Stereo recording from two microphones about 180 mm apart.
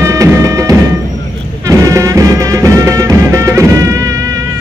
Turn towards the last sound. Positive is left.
turn(degrees=-15)  # may be behind; listen again after turning